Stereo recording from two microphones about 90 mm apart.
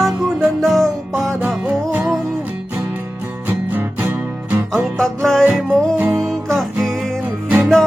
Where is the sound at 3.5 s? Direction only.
20° right (ahead or behind).